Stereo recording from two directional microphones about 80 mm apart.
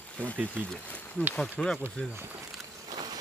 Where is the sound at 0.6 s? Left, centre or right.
Centre.